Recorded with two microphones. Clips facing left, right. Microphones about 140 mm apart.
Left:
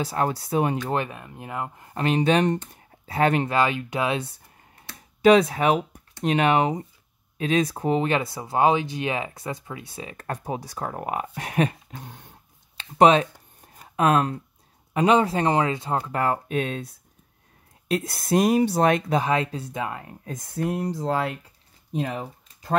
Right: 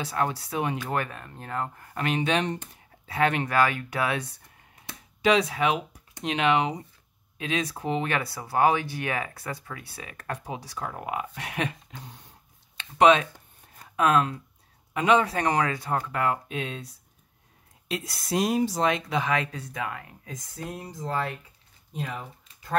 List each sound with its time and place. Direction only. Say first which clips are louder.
0.0 s speech: left 3 dB; 35° left (ahead or behind)
0.9 s speech: left 3 dB; 20° left (ahead or behind)
2.0 s speech: left 5 dB; 35° left (ahead or behind)
3.4 s speech: left 1 dB; 20° left (ahead or behind)
5.2 s speech: left 6 dB; 45° left (ahead or behind)
8.1 s speech: left 4 dB; 20° left (ahead or behind); by 12.4 s 55° left (ahead or behind)
12.7 s speech: left 2 dB; 35° left (ahead or behind)
16.4 s speech: left 7 dB; 50° left (ahead or behind)
17.8 s speech: left 7 dB; 50° left (ahead or behind)
19.2 s speech: left 4 dB; 30° left (ahead or behind)
20.2 s speech: left 10 dB; 55° left (ahead or behind); by 22.8 s 90° left